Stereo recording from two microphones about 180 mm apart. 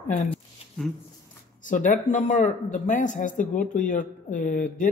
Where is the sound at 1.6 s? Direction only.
45° left (ahead or behind).